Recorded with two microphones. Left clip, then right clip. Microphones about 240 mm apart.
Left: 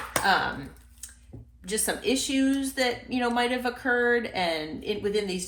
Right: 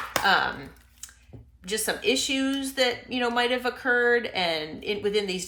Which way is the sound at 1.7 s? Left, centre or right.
Right.